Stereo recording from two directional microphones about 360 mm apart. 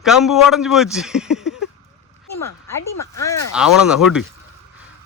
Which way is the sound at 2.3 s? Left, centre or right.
Left.